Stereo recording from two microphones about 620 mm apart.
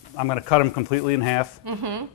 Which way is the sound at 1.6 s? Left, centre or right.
Right.